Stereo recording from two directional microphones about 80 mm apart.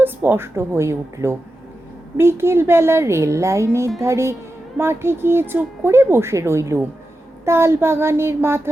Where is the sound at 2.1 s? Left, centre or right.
Right.